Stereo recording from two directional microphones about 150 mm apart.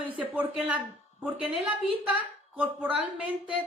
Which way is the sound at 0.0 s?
10° right (ahead or behind).